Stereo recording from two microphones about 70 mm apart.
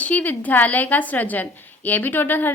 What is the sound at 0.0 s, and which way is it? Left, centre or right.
A woman's voice, left.